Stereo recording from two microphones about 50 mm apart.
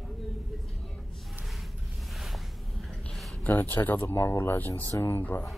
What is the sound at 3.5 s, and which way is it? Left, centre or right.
Speech, left.